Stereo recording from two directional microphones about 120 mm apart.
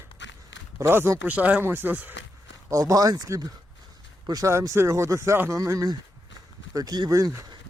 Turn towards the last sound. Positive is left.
turn(degrees=-30)  # may be behind; listen again after turning